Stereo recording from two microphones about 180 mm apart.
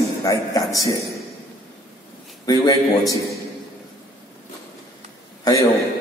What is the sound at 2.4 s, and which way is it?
Speech, 20° left (ahead or behind).